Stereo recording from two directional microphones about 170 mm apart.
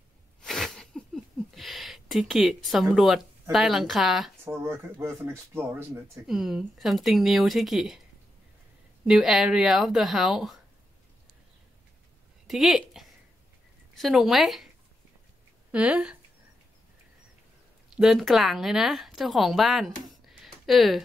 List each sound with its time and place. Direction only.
0.4 s a sound: centre (ahead or behind)
3.5 s speech: centre (ahead or behind)
4.5 s speech: 15° right (ahead or behind)
6.2 s speech: centre (ahead or behind)
9.0 s speech: 5° right (ahead or behind)
12.4 s speech: centre (ahead or behind)
15.7 s speech: 5° right (ahead or behind)
17.9 s speech: centre (ahead or behind)